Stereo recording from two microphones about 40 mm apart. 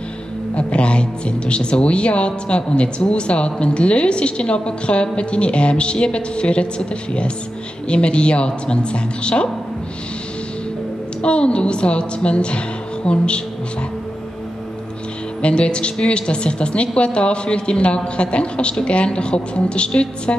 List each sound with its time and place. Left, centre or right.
0.6 s a woman's voice: left
7.9 s a woman's voice: left
11.2 s a woman's voice: left
15.4 s a woman's voice: left